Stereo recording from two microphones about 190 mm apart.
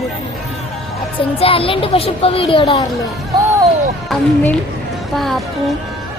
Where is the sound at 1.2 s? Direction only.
30° left (ahead or behind).